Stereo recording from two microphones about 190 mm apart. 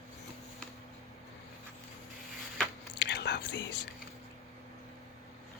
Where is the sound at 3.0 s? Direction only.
65° left (ahead or behind).